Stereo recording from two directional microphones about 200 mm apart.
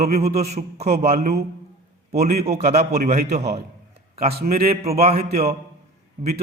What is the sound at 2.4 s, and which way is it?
Speech, 35° right (ahead or behind).